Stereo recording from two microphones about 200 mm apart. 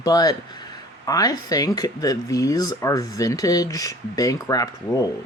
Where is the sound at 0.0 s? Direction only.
20° left (ahead or behind).